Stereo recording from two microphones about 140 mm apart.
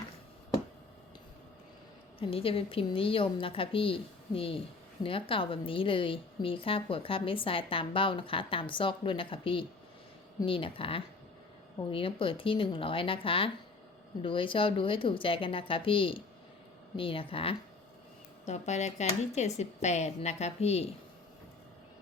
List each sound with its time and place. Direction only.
2.1 s a woman's voice: 40° left (ahead or behind)
18.4 s speech: 50° left (ahead or behind)